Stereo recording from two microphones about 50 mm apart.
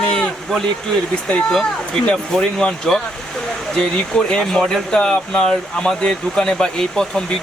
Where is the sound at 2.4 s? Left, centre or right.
Centre.